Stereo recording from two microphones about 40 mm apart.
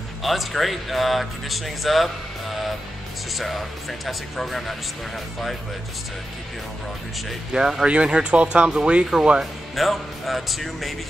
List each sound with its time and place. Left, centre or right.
0.2 s speech: centre
3.3 s speech: centre
7.5 s speech: centre
9.4 s speech: centre